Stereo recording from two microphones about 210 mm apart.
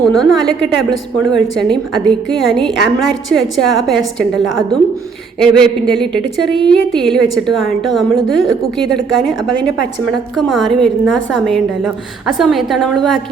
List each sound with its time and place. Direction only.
0.1 s a woman's voice: centre (ahead or behind)
10.3 s a woman's voice: centre (ahead or behind)